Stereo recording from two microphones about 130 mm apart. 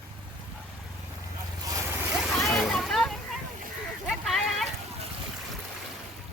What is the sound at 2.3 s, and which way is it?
Splash, centre (ahead or behind).